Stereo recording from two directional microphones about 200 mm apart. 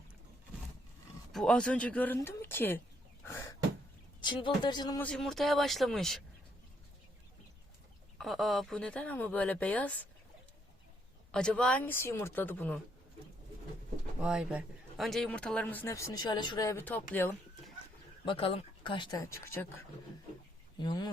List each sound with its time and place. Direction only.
1.3 s speech: centre (ahead or behind)
3.2 s a sound: 15° left (ahead or behind)
4.2 s speech: 25° left (ahead or behind)
4.9 s speech: 5° left (ahead or behind)
8.2 s speech: centre (ahead or behind)
11.3 s speech: 5° left (ahead or behind)
14.2 s speech: 5° right (ahead or behind)
18.3 s speech: 30° left (ahead or behind)